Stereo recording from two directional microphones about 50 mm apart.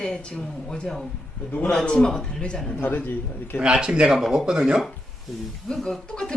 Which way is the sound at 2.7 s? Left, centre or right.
Left.